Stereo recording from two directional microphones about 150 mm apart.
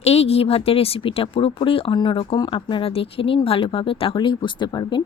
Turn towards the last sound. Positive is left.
turn(degrees=30)  # may be behind; listen again after turning